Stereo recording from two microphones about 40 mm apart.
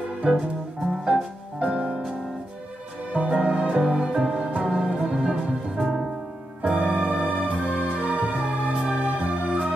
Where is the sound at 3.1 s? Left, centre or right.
Right.